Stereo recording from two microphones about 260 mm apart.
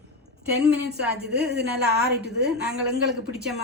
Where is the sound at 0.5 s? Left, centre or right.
Right.